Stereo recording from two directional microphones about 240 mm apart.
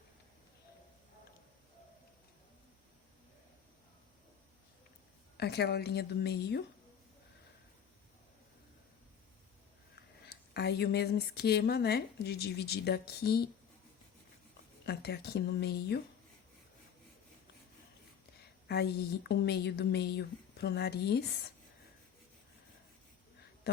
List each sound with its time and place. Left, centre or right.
5.4 s speech: left
10.2 s speech: left
14.8 s speech: left
18.7 s speech: left
23.7 s speech: left